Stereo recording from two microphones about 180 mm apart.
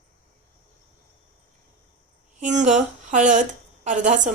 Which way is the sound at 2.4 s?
40° right (ahead or behind).